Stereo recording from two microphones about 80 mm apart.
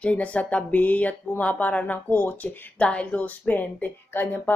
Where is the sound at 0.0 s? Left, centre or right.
Centre.